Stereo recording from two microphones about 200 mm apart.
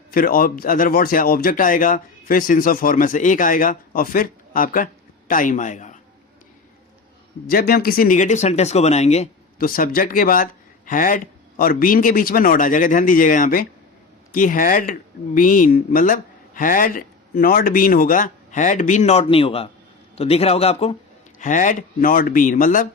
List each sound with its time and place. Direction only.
0.1 s speech: 45° left (ahead or behind)
7.5 s speech: 50° left (ahead or behind)